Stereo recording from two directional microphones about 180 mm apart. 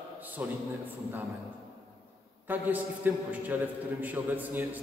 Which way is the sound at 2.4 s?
10° right (ahead or behind).